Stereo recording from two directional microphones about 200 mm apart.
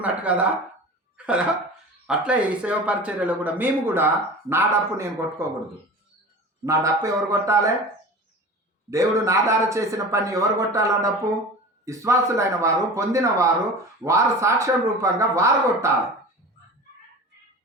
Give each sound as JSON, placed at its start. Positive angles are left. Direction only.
{"t": 0.0, "sound": "speech", "side_deg": -5}
{"t": 1.1, "sound": "a sound", "side_deg": -5}
{"t": 2.0, "sound": "speech", "side_deg": -5}
{"t": 6.7, "sound": "speech", "side_deg": -15}
{"t": 8.9, "sound": "speech", "side_deg": -15}